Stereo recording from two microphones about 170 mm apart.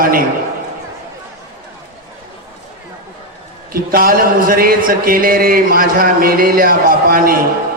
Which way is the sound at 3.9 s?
55° right (ahead or behind).